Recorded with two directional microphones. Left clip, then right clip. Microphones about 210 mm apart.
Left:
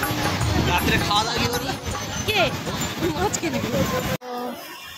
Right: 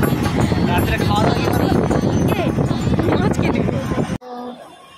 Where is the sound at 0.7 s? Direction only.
45° right (ahead or behind).